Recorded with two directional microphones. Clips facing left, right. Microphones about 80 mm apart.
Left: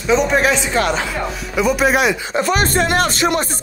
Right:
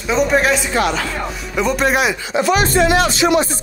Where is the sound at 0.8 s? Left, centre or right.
Left.